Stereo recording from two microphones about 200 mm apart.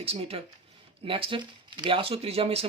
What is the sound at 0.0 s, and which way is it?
Speech, 30° right (ahead or behind).